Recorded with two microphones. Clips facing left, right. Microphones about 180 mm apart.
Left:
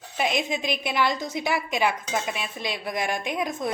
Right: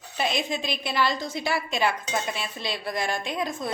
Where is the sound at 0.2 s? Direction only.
20° left (ahead or behind).